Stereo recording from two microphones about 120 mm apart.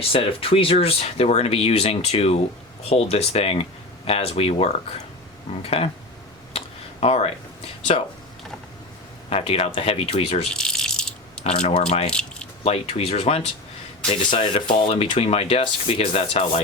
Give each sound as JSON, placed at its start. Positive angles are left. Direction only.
{"t": 0.1, "sound": "speech", "side_deg": 50}
{"t": 6.5, "sound": "a sound", "side_deg": 60}
{"t": 7.0, "sound": "speech", "side_deg": 55}
{"t": 9.3, "sound": "speech", "side_deg": 55}
{"t": 10.5, "sound": "rattle", "side_deg": 5}
{"t": 11.4, "sound": "speech", "side_deg": 65}
{"t": 14.3, "sound": "speech", "side_deg": 45}